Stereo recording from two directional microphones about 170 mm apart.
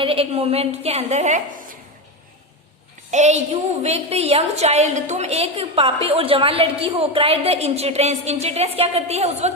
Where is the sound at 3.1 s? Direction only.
45° right (ahead or behind).